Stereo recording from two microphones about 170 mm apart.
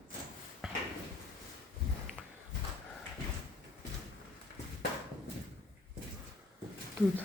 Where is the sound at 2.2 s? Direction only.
10° left (ahead or behind).